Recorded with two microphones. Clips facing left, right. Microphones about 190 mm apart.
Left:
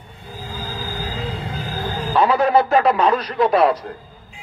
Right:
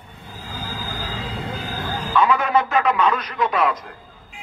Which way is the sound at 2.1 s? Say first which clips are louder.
Left 3 dB; 35° left (ahead or behind).